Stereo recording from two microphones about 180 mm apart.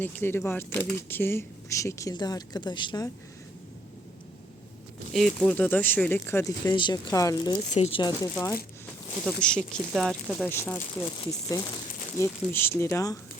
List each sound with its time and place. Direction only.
0.0 s speech: 10° left (ahead or behind)
5.1 s speech: centre (ahead or behind)
6.7 s speech: 25° left (ahead or behind)
7.7 s speech: 35° left (ahead or behind); by 8.5 s 15° left (ahead or behind)
9.2 s speech: 5° left (ahead or behind)
10.5 s speech: 15° left (ahead or behind)